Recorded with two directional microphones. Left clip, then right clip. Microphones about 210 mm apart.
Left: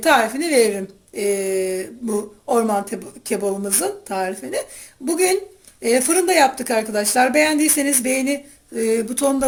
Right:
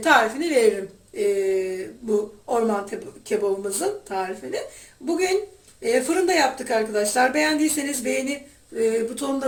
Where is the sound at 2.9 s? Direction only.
50° left (ahead or behind).